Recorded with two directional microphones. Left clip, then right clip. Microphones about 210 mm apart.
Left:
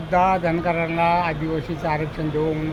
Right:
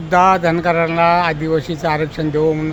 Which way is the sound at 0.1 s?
50° right (ahead or behind).